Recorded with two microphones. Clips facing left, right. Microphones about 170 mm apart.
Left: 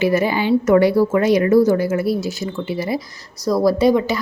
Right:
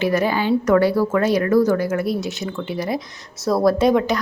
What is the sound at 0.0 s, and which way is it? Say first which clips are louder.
A woman's voice: left 2 dB; 10° left (ahead or behind).